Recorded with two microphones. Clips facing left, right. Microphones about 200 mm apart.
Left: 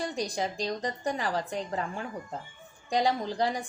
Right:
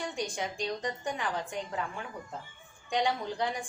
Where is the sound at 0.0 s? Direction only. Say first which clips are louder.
Left 3 dB; 35° left (ahead or behind).